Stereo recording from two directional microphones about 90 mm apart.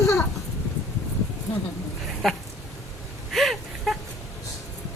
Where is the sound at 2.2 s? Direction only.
Centre (ahead or behind).